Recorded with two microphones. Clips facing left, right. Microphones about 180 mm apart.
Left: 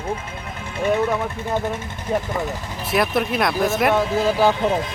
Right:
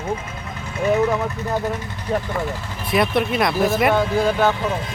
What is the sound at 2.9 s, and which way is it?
Speech, centre (ahead or behind).